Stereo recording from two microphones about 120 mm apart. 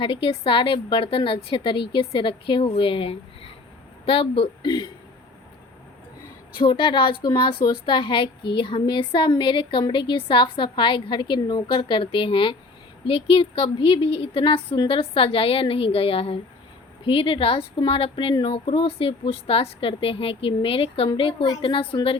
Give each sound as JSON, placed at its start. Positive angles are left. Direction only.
{"t": 0.0, "sound": "a woman's voice", "side_deg": 45}
{"t": 6.6, "sound": "a woman's voice", "side_deg": 45}